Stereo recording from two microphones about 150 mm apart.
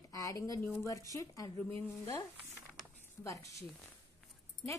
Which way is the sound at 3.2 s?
20° left (ahead or behind).